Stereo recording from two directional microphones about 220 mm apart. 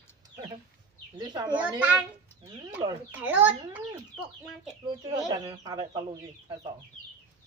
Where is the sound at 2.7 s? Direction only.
10° right (ahead or behind).